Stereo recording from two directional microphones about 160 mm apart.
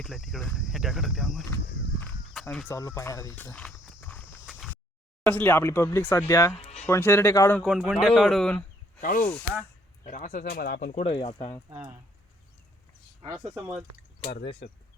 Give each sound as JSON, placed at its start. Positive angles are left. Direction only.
{"t": 0.0, "sound": "cricket", "side_deg": 0}
{"t": 2.3, "sound": "a sound", "side_deg": 0}
{"t": 2.6, "sound": "speech", "side_deg": 20}
{"t": 4.4, "sound": "a sound", "side_deg": -5}
{"t": 5.2, "sound": "speech", "side_deg": 10}
{"t": 6.5, "sound": "music", "side_deg": 40}
{"t": 6.8, "sound": "speech", "side_deg": 15}
{"t": 7.6, "sound": "cricket", "side_deg": 0}
{"t": 9.0, "sound": "speech", "side_deg": 55}
{"t": 11.0, "sound": "speech", "side_deg": 35}
{"t": 11.7, "sound": "speech", "side_deg": -15}